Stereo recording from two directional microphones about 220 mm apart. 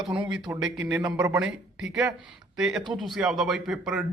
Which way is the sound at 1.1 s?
15° right (ahead or behind).